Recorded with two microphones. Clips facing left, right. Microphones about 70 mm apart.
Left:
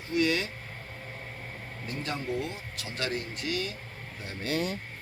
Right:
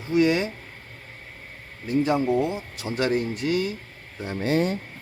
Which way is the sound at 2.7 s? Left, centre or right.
Right.